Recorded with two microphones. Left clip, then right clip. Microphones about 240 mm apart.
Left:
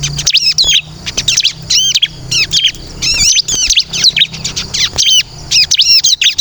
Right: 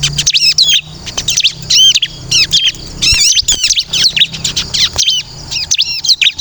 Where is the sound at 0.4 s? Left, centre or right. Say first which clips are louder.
Right 3 dB; centre.